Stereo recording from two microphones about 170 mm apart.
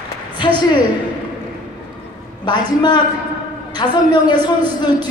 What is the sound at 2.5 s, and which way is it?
A man's voice, 25° left (ahead or behind).